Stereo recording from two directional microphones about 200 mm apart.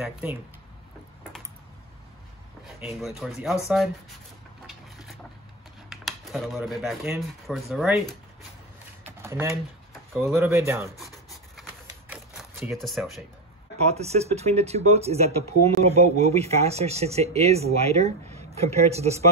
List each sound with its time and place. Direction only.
0.0 s speech: 5° right (ahead or behind)
3.0 s speech: centre (ahead or behind)
5.9 s speech: centre (ahead or behind)
9.2 s speech: 15° right (ahead or behind)
12.1 s typewriter: 10° right (ahead or behind)
12.7 s speech: centre (ahead or behind)
13.9 s speech: 30° right (ahead or behind)